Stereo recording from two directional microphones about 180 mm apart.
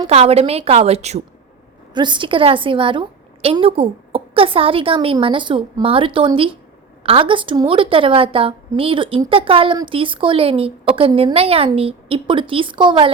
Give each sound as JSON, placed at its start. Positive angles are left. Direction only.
{"t": 0.1, "sound": "a woman's voice", "side_deg": -35}
{"t": 1.9, "sound": "a woman's voice", "side_deg": -25}